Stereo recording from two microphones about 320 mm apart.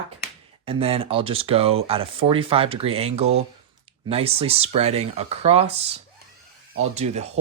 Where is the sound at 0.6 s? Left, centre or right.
Centre.